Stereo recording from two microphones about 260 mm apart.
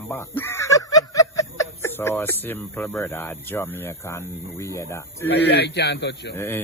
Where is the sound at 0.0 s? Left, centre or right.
Centre.